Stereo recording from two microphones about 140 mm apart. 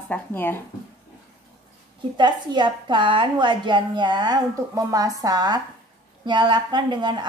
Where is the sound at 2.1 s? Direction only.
35° right (ahead or behind).